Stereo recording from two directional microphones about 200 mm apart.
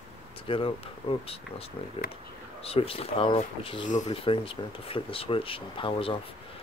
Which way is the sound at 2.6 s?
30° left (ahead or behind).